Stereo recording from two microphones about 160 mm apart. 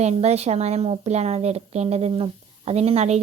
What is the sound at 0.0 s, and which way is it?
A woman's voice, 40° right (ahead or behind).